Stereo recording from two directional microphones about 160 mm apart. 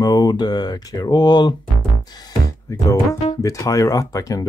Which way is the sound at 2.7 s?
20° left (ahead or behind).